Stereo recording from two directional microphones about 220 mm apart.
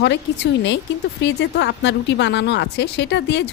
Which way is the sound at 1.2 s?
50° left (ahead or behind).